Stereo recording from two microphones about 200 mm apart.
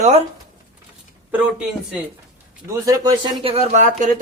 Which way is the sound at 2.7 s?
20° right (ahead or behind).